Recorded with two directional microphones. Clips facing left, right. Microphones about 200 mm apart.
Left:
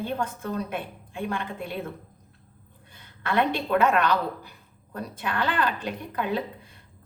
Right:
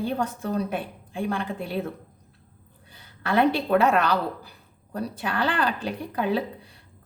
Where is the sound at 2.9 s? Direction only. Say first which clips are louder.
Right 3 dB; 35° right (ahead or behind).